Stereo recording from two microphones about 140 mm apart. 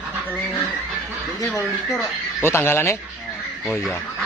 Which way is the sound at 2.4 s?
20° left (ahead or behind).